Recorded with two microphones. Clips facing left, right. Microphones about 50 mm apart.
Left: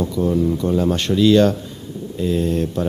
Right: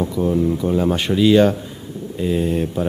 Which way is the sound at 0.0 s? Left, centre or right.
Centre.